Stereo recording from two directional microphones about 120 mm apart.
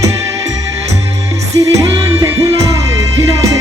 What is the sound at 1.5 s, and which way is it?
Music, 25° right (ahead or behind).